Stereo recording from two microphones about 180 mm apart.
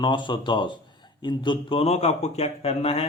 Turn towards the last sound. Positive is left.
turn(degrees=35)  # may be behind; listen again after turning